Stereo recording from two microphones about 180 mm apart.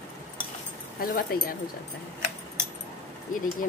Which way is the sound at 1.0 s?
55° left (ahead or behind).